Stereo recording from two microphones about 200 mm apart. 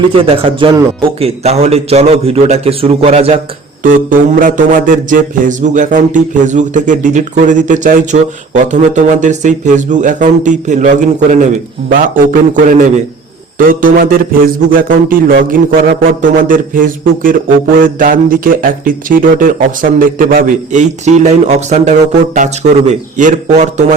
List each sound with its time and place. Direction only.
0.1 s speech: 25° right (ahead or behind)
3.8 s speech: 45° right (ahead or behind)
11.9 s a sound: 45° right (ahead or behind)
22.4 s speech: 35° right (ahead or behind)